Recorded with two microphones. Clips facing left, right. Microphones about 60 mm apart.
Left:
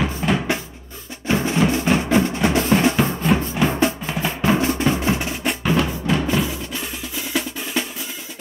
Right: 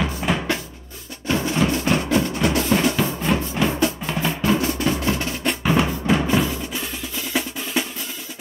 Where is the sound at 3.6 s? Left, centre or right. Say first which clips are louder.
Left 2 dB; centre.